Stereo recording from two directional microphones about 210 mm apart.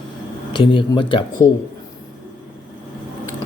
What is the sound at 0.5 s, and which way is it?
Speech, 25° left (ahead or behind).